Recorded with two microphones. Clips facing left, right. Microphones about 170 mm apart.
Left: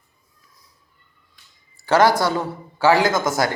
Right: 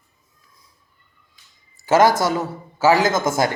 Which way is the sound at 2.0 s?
45° right (ahead or behind).